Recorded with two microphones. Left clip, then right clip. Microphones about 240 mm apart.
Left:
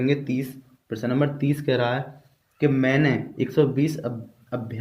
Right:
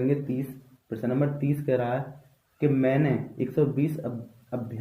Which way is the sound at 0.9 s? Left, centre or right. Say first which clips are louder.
Left 3 dB; left.